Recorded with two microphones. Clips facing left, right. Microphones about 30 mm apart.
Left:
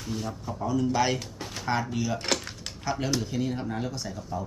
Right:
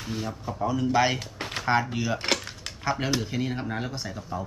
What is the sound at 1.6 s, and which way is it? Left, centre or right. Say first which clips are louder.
Speech: right 3 dB; right.